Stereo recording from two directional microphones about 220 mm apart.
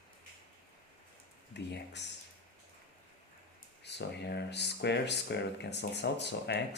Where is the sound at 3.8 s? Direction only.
50° left (ahead or behind).